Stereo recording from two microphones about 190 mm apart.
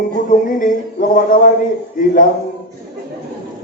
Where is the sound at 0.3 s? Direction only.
45° left (ahead or behind).